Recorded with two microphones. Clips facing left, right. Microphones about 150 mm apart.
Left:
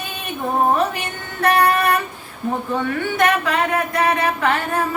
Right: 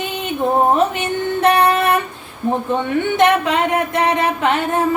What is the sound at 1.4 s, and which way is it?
Female singing, 20° right (ahead or behind).